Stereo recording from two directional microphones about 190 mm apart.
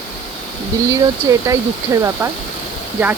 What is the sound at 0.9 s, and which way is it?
Speech, 15° right (ahead or behind).